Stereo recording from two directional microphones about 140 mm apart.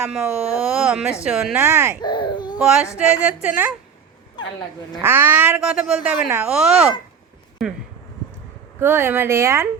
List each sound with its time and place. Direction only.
0.1 s speech: 5° right (ahead or behind)
1.6 s speech: 15° right (ahead or behind)
2.0 s baby cry: 35° left (ahead or behind)
2.6 s speech: 5° right (ahead or behind)
4.4 s a sound: 30° left (ahead or behind)
5.0 s speech: 15° right (ahead or behind)
6.5 s speech: 5° right (ahead or behind)
8.8 s speech: 15° right (ahead or behind)